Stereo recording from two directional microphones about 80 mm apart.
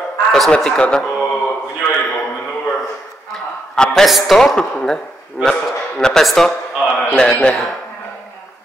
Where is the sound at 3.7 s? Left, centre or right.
Centre.